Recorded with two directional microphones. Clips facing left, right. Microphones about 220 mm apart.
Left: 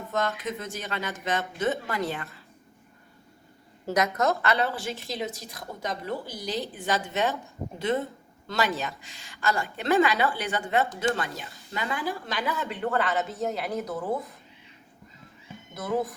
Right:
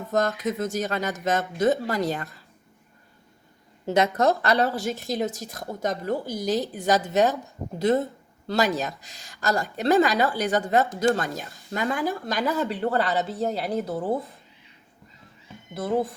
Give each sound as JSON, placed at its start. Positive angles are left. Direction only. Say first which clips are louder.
{"t": 0.1, "sound": "speech", "louder": "right 5 dB", "side_deg": -45}
{"t": 3.8, "sound": "speech", "louder": "right 4 dB", "side_deg": -30}
{"t": 8.4, "sound": "speech", "louder": "right 4 dB", "side_deg": -40}
{"t": 15.7, "sound": "speech", "louder": "right 3 dB", "side_deg": -30}